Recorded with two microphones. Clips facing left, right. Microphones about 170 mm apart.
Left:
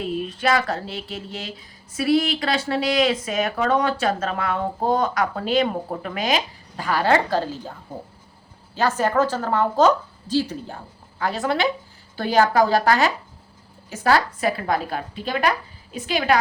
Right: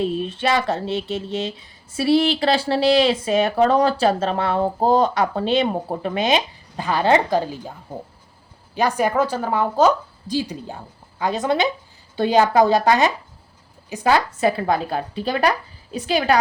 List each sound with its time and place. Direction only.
0.0 s speech: 25° right (ahead or behind)
8.7 s a woman's voice: 15° right (ahead or behind); by 16.4 s 30° right (ahead or behind)